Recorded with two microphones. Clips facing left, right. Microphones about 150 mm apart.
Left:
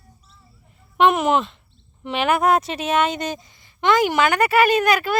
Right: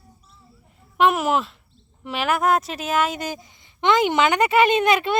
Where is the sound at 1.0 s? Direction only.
5° right (ahead or behind).